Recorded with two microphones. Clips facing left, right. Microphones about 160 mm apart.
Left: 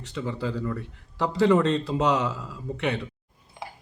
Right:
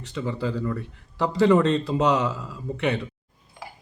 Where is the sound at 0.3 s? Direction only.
70° right (ahead or behind).